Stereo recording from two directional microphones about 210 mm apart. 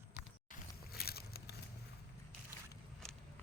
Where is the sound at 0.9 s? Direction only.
45° left (ahead or behind).